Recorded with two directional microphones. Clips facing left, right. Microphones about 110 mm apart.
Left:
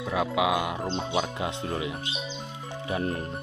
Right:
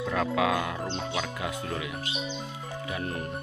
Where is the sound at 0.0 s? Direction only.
5° left (ahead or behind); by 1.9 s 25° left (ahead or behind).